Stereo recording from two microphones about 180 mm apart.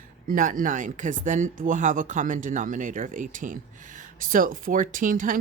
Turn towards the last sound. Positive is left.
turn(degrees=-50)  # may be behind; listen again after turning